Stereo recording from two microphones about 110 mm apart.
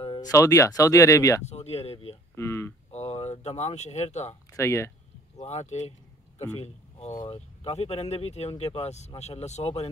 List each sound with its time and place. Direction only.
0.2 s speech: 30° left (ahead or behind)
1.4 s speech: 75° left (ahead or behind)
2.3 s speech: 25° left (ahead or behind)
2.9 s speech: 75° left (ahead or behind); by 4.4 s 90° left
4.5 s speech: 25° left (ahead or behind)
5.4 s a man's voice: 85° left
7.2 s speech: 70° left (ahead or behind)